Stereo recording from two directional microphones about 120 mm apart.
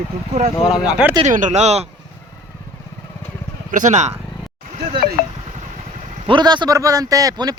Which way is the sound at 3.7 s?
85° right.